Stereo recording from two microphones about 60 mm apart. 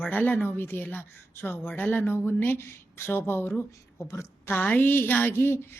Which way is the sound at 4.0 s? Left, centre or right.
Left.